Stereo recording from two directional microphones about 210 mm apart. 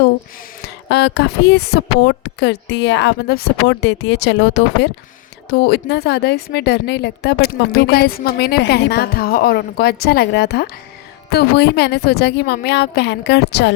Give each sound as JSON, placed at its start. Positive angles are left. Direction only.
{"t": 0.9, "sound": "a woman's voice", "side_deg": 55}